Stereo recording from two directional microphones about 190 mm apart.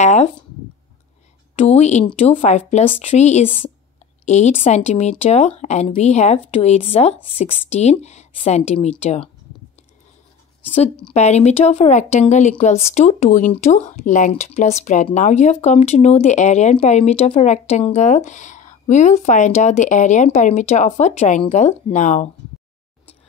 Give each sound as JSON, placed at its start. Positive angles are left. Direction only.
{"t": 0.0, "sound": "speech", "side_deg": 35}
{"t": 1.6, "sound": "speech", "side_deg": 35}
{"t": 11.1, "sound": "speech", "side_deg": 35}